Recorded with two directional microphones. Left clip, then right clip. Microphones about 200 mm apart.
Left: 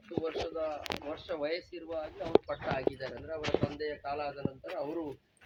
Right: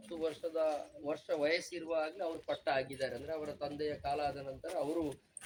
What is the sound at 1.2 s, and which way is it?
Speech, 20° right (ahead or behind).